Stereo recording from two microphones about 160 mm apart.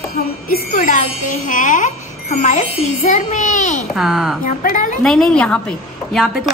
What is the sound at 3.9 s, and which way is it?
Speech, centre (ahead or behind).